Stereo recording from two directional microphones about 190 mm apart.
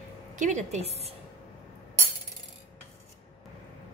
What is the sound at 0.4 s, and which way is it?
Speech, 40° right (ahead or behind).